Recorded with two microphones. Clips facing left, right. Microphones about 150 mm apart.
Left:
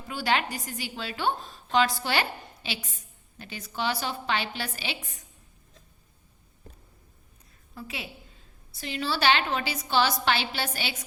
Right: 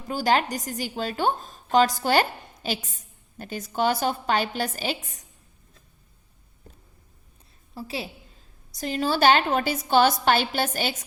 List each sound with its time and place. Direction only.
0.1 s a woman's voice: 40° right (ahead or behind)
7.8 s a woman's voice: 35° right (ahead or behind)